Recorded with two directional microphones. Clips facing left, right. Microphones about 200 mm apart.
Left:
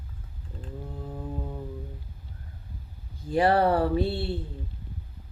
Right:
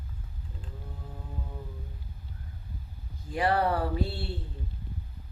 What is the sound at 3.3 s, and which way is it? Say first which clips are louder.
Speech: left 5 dB; 30° left (ahead or behind).